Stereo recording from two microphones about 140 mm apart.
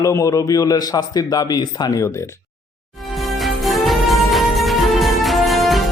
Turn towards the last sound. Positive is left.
turn(degrees=0)  # may be behind; listen again after turning